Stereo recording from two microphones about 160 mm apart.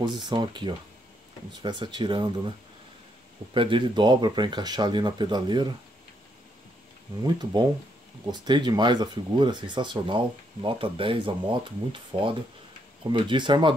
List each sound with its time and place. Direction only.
0.0 s speech: 25° right (ahead or behind)
3.5 s speech: 30° right (ahead or behind)
7.2 s speech: 25° right (ahead or behind)